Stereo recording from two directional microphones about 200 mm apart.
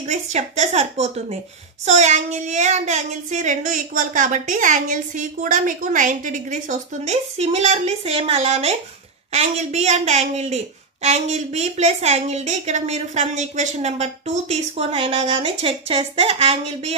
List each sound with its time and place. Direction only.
0.0 s a woman's voice: 35° right (ahead or behind)